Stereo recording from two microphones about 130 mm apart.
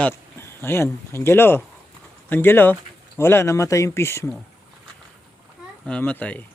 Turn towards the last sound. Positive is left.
turn(degrees=10)  # may be behind; listen again after turning